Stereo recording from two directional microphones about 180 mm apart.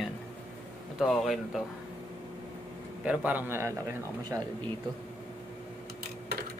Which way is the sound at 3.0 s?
5° right (ahead or behind).